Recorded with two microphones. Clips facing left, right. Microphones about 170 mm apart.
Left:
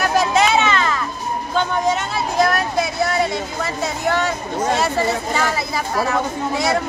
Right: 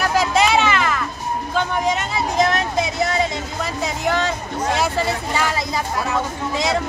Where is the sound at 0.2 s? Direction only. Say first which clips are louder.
Even; 10° right (ahead or behind).